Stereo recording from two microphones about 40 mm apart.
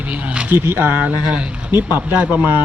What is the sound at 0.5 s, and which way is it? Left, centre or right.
Speech, right.